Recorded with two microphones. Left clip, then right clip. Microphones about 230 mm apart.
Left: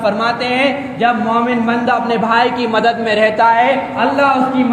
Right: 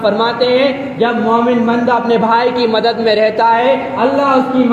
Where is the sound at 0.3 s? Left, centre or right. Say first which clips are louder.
Right 3 dB; left.